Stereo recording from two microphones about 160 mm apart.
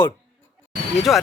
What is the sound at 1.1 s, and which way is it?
Speech, centre (ahead or behind).